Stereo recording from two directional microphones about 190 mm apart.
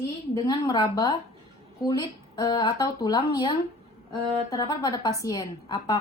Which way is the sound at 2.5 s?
25° left (ahead or behind).